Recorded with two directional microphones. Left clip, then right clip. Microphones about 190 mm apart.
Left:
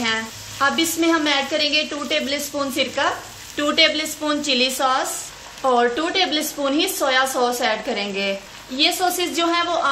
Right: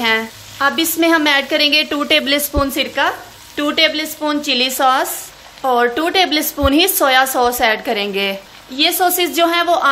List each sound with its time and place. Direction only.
0.0 s a woman's voice: 30° right (ahead or behind)